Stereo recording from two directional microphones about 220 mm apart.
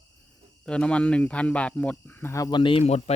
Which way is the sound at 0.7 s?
5° left (ahead or behind).